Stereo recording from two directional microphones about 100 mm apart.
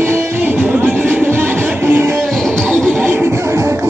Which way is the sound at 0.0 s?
20° right (ahead or behind).